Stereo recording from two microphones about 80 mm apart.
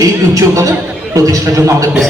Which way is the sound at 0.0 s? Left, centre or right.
Right.